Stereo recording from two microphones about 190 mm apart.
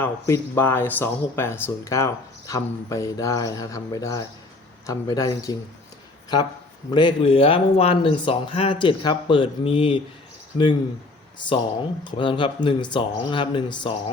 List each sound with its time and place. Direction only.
0.0 s speech: 10° left (ahead or behind)
6.9 s speech: 25° left (ahead or behind)
11.3 s speech: 25° left (ahead or behind)